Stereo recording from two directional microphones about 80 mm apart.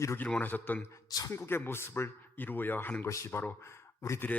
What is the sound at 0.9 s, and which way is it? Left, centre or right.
Speech, left.